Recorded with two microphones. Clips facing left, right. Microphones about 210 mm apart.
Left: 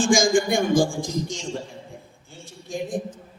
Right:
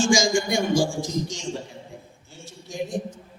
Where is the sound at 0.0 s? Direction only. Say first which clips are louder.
Left 2 dB; 55° left (ahead or behind).